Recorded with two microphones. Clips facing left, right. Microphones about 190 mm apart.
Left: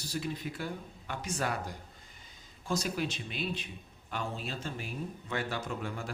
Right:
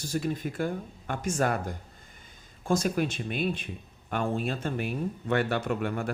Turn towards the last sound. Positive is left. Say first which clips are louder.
# right 8 dB
turn(degrees=-60)  # may be behind; listen again after turning